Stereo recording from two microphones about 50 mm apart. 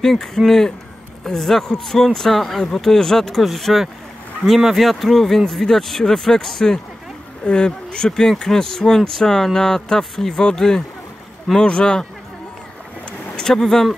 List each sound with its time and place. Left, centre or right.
0.0 s speech: centre
13.4 s speech: centre